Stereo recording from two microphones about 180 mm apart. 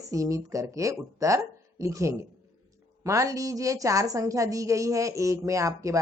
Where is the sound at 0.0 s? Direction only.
20° right (ahead or behind).